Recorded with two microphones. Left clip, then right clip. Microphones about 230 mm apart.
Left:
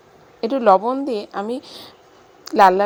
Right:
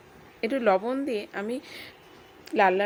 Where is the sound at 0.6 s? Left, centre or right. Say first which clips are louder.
Left 10 dB; centre.